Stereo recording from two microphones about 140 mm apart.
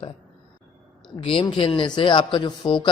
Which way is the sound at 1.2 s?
40° left (ahead or behind).